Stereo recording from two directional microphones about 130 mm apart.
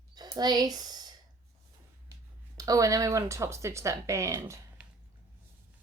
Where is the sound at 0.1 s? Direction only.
30° right (ahead or behind).